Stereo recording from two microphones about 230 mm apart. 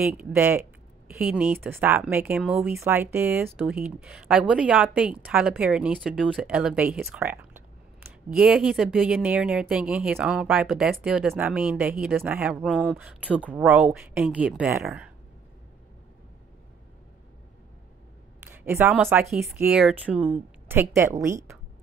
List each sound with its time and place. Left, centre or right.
0.0 s speech: centre
18.5 s a woman's voice: centre